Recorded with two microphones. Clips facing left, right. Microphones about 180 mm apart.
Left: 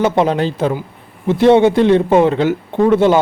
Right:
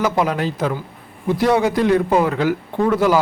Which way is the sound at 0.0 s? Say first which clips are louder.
Left 5 dB; 30° left (ahead or behind).